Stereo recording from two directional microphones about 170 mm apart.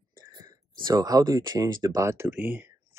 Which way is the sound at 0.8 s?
20° right (ahead or behind).